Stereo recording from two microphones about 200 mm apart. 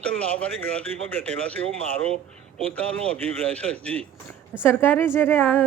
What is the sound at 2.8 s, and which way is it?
A woman's voice, 5° left (ahead or behind).